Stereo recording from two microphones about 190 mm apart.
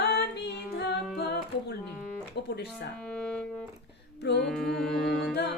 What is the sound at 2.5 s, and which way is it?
Music, 60° left (ahead or behind).